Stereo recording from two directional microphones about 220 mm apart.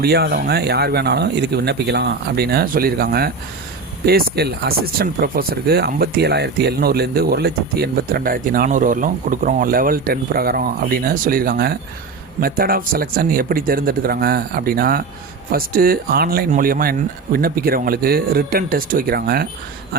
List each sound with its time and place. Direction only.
0.0 s speech: 45° right (ahead or behind)